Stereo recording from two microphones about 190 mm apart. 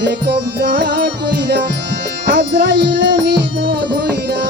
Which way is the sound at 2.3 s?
55° right (ahead or behind).